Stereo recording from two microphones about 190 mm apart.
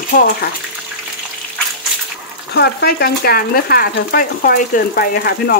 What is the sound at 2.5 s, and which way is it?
Speech, 60° left (ahead or behind).